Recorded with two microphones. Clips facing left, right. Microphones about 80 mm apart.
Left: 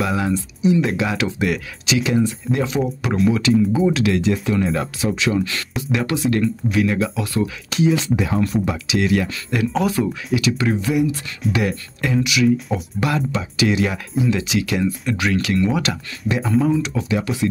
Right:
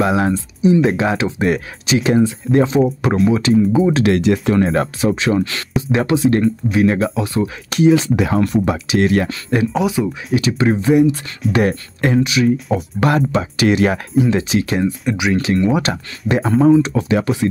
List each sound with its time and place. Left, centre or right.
0.2 s speech: right
3.9 s speech: right
4.2 s speech: right
4.6 s speech: right
7.7 s speech: right
8.2 s speech: right
8.8 s speech: right
9.7 s speech: centre
10.3 s speech: right
12.3 s speech: right
12.7 s speech: right
15.0 s speech: centre
15.4 s speech: right